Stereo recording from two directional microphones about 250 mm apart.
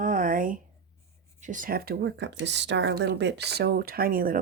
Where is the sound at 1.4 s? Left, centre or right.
Right.